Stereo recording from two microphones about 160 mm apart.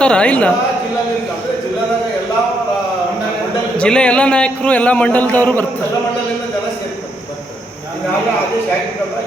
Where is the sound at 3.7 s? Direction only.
5° left (ahead or behind).